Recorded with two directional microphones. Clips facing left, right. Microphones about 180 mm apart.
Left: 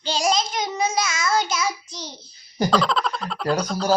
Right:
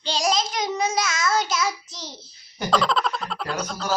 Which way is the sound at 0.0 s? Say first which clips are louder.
Left 1 dB; centre (ahead or behind).